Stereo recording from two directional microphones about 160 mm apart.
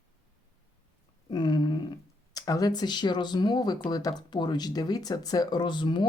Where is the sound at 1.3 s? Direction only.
25° left (ahead or behind).